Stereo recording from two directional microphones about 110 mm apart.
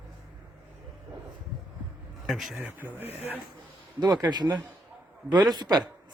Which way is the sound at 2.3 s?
Centre (ahead or behind).